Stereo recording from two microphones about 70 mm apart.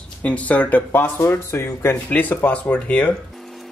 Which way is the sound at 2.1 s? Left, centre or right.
Left.